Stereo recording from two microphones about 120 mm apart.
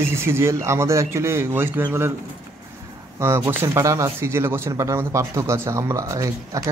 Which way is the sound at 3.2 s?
20° right (ahead or behind).